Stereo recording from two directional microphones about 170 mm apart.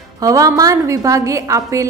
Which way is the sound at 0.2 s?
20° right (ahead or behind).